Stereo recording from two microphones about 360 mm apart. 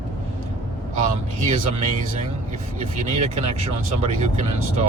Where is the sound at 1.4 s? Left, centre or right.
Centre.